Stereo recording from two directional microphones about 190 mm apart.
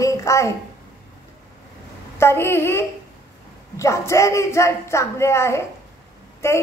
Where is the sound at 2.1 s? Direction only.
10° left (ahead or behind).